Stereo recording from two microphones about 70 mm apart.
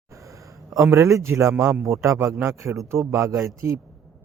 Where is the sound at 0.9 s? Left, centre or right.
Right.